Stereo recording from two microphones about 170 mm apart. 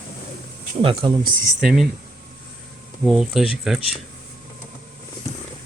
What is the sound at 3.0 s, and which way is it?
Speech, 5° right (ahead or behind).